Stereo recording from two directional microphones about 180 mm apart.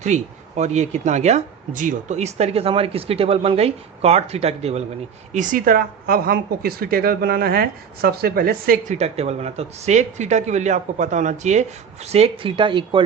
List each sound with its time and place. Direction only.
0.0 s a woman's voice: 40° right (ahead or behind); by 8.8 s 55° right (ahead or behind)
8.9 s speech: 35° right (ahead or behind)